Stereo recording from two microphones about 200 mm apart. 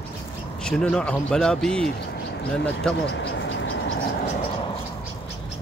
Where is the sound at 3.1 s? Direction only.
65° left (ahead or behind).